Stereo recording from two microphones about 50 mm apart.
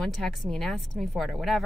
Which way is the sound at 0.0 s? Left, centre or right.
Centre.